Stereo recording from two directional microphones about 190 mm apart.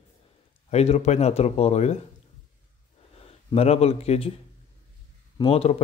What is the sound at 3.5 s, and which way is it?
Speech, 35° left (ahead or behind).